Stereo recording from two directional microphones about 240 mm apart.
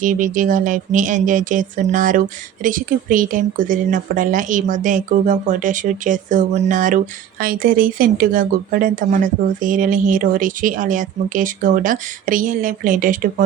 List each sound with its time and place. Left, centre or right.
0.0 s speech: right